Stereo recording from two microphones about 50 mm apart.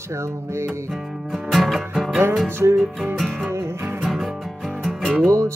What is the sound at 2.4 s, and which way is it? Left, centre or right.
Music, right.